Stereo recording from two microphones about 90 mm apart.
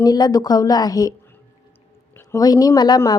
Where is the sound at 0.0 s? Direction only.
45° left (ahead or behind).